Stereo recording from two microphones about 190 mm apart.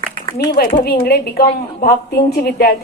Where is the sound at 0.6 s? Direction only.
55° left (ahead or behind).